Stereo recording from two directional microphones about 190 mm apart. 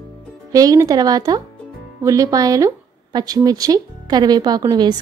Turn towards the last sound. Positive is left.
turn(degrees=-20)  # may be behind; listen again after turning